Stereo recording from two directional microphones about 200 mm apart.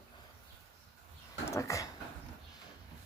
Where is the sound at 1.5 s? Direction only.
15° left (ahead or behind).